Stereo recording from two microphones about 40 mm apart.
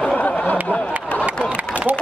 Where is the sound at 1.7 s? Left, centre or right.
Right.